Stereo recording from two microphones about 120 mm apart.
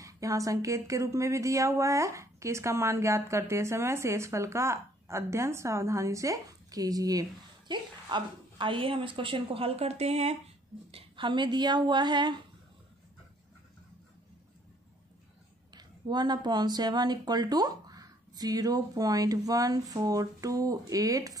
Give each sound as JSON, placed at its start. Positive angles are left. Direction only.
{"t": 0.0, "sound": "speech", "side_deg": -25}
{"t": 10.9, "sound": "speech", "side_deg": -50}
{"t": 15.7, "sound": "speech", "side_deg": -35}